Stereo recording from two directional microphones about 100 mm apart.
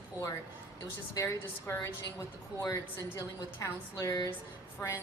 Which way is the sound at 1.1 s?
30° left (ahead or behind).